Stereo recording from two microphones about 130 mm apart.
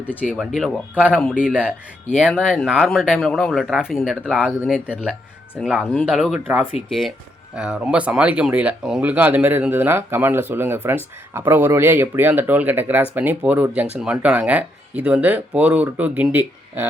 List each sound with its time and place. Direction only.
0.0 s speech: 15° left (ahead or behind)
0.3 s speech: centre (ahead or behind)
6.8 s speech: 50° left (ahead or behind)
7.5 s speech: 5° right (ahead or behind)